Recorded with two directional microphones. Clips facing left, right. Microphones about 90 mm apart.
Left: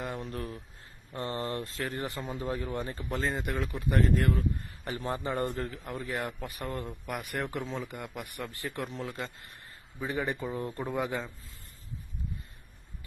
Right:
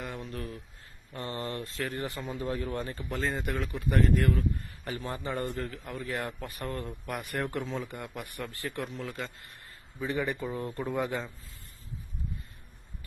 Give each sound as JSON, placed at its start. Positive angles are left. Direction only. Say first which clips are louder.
{"t": 0.2, "sound": "a sound", "louder": "left 1 dB", "side_deg": 35}
{"t": 1.1, "sound": "a man's voice", "louder": "left 2 dB", "side_deg": 30}
{"t": 7.0, "sound": "a man's voice", "louder": "right 2 dB", "side_deg": 5}
{"t": 8.4, "sound": "a man's voice", "louder": "right 1 dB", "side_deg": 20}